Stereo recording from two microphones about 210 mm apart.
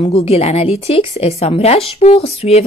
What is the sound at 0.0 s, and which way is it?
Speech, 30° left (ahead or behind).